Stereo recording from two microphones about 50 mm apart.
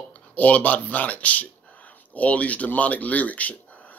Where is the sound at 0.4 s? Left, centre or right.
Left.